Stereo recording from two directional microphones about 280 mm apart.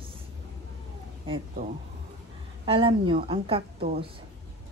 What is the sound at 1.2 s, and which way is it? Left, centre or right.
A woman's voice, centre.